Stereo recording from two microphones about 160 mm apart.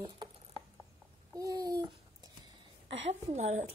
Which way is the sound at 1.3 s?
20° right (ahead or behind).